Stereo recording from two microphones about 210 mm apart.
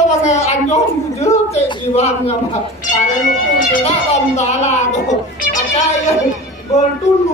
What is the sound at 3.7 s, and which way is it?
A woman's voice, 30° left (ahead or behind).